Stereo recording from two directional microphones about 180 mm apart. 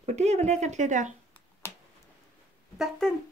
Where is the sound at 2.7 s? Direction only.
Centre (ahead or behind).